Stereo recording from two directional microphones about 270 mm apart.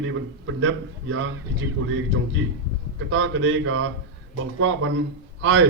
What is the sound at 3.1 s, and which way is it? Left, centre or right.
A man's voice, right.